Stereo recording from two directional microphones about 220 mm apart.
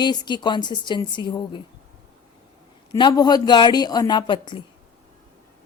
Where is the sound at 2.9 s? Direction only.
20° left (ahead or behind).